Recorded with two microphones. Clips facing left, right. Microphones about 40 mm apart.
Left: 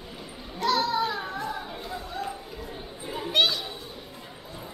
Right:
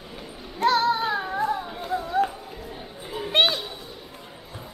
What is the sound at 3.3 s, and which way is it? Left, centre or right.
Children playing, right.